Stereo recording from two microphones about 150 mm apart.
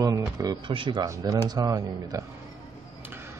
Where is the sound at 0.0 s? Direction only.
25° right (ahead or behind).